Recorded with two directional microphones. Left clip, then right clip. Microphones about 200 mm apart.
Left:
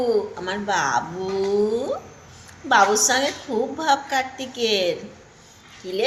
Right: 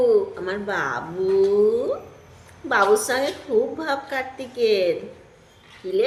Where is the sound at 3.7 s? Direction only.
15° right (ahead or behind).